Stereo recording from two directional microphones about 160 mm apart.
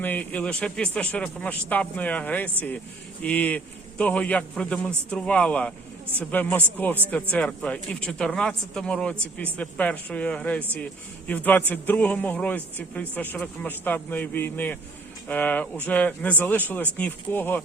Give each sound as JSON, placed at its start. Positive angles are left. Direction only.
{"t": 0.0, "sound": "a man's voice", "side_deg": 10}